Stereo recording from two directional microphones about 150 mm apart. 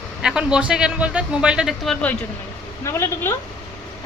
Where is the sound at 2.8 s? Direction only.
15° left (ahead or behind).